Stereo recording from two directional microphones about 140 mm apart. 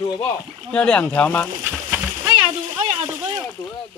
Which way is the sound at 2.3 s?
40° right (ahead or behind).